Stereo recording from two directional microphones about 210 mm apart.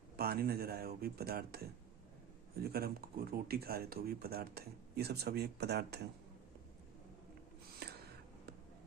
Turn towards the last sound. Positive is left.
turn(degrees=-50)  # may be behind; listen again after turning